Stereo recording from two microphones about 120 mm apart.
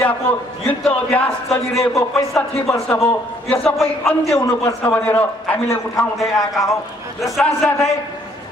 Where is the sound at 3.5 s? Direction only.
5° left (ahead or behind).